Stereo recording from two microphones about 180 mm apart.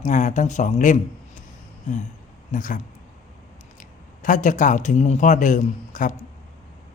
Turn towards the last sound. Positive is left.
turn(degrees=45)  # may be behind; listen again after turning